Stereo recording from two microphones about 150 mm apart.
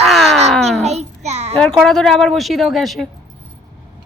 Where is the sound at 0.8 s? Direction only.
45° right (ahead or behind).